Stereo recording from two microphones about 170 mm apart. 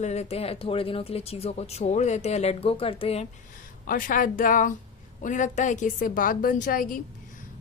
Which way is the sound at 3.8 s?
55° left (ahead or behind).